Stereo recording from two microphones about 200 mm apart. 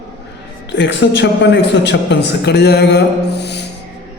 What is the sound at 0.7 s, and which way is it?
A man's voice, 60° left (ahead or behind).